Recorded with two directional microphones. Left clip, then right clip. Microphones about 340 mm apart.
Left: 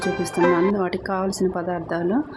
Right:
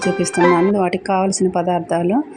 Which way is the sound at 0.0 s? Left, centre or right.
Centre.